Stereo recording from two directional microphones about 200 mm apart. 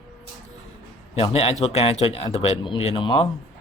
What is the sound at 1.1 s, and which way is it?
A man's voice, 30° left (ahead or behind).